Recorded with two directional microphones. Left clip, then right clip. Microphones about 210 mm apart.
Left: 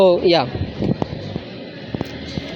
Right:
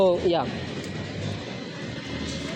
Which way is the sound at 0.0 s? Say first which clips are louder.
Left 8 dB; 25° left (ahead or behind).